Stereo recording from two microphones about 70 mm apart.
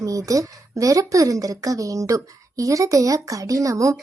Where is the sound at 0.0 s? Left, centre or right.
Right.